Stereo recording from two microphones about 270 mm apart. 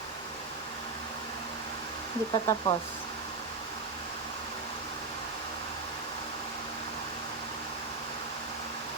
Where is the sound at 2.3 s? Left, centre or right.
Centre.